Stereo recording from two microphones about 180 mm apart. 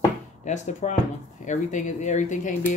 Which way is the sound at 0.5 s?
40° left (ahead or behind).